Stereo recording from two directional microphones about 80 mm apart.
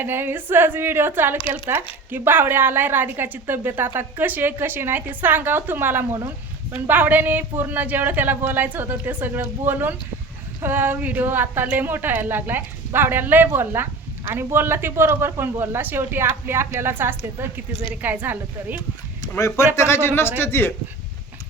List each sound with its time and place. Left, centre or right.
0.0 s a woman's voice: right
19.4 s a man's voice: left